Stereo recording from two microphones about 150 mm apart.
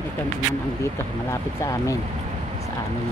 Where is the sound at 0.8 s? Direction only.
20° left (ahead or behind).